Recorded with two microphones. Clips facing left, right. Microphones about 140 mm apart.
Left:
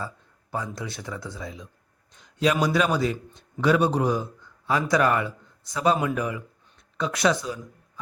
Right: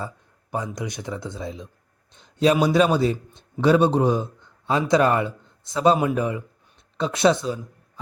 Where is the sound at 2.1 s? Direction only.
30° right (ahead or behind).